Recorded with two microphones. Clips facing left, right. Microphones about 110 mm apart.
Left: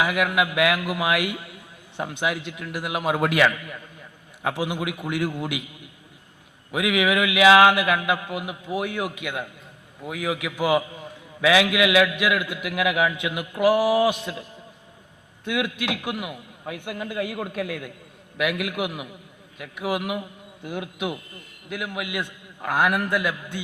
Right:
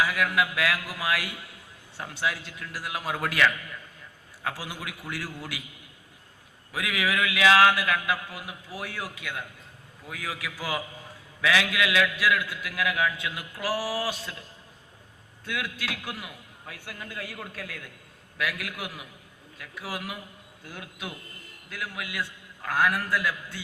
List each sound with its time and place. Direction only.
0.0 s a man's voice: 20° left (ahead or behind)
6.7 s a man's voice: 20° left (ahead or behind)
15.4 s a man's voice: 20° left (ahead or behind)